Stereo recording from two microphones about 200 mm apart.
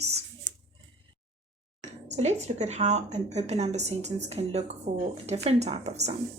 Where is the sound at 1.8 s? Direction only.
35° right (ahead or behind).